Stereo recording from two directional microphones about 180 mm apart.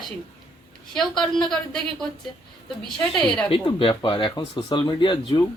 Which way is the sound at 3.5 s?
30° left (ahead or behind).